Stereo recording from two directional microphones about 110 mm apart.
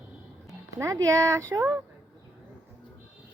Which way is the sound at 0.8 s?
30° right (ahead or behind).